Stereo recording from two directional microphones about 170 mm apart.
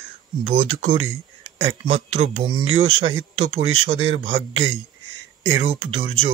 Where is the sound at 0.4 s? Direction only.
35° right (ahead or behind).